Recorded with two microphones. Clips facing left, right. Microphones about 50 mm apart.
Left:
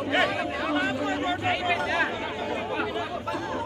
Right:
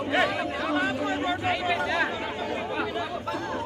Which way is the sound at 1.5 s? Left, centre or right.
Left.